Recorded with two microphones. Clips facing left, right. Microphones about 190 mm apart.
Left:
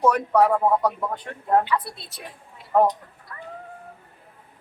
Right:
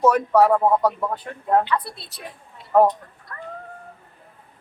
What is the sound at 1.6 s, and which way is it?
Speech, 5° left (ahead or behind).